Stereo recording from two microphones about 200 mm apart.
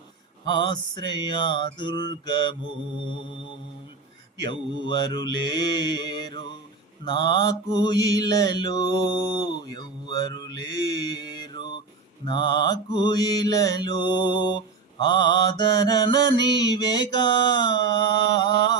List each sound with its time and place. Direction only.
0.4 s mantra: 25° left (ahead or behind)
4.4 s mantra: 20° left (ahead or behind)